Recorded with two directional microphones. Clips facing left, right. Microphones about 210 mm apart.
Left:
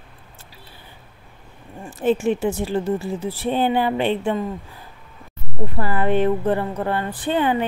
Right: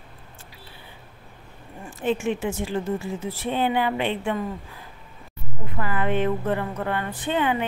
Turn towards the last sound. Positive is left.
turn(degrees=35)  # may be behind; listen again after turning